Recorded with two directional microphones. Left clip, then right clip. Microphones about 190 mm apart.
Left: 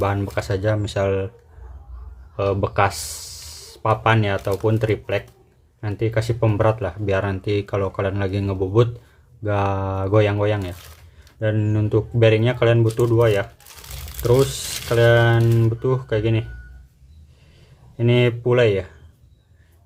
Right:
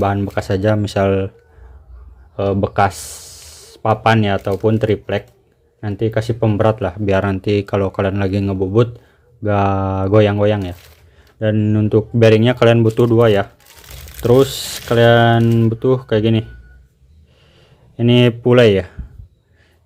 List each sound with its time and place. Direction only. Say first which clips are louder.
0.0 s speech: right 5 dB; 25° right (ahead or behind)
2.3 s speech: right 3 dB; 25° right (ahead or behind)
17.9 s speech: right 5 dB; 35° right (ahead or behind)